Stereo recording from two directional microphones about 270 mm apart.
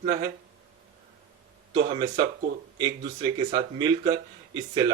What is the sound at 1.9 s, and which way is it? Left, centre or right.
A man's voice, centre.